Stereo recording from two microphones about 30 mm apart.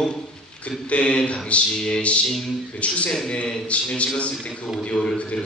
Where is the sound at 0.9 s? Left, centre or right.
Left.